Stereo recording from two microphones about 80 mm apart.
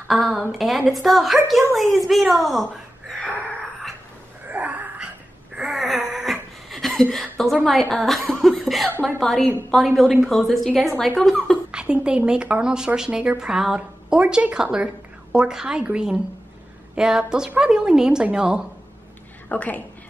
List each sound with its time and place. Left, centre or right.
0.1 s a woman's voice: centre
3.2 s gasp: centre
4.5 s wheeze: centre
5.6 s a sound: centre
7.6 s a woman's voice: centre
11.7 s speech: centre
19.5 s a woman's voice: centre